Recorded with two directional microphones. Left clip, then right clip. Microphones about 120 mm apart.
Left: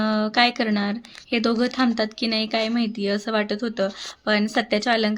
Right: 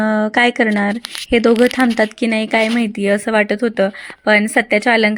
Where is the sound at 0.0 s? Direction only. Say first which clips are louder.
Right 6 dB; 55° right (ahead or behind).